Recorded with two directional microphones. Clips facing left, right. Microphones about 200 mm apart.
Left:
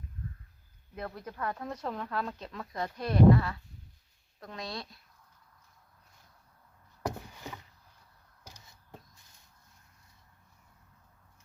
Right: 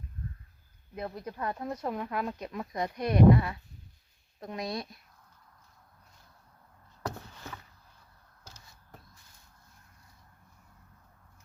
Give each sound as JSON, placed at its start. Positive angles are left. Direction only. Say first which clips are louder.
{"t": 0.9, "sound": "speech", "louder": "right 2 dB", "side_deg": -15}
{"t": 7.0, "sound": "rowboat", "louder": "left 2 dB", "side_deg": 15}
{"t": 8.4, "sound": "caw", "louder": "left 1 dB", "side_deg": 15}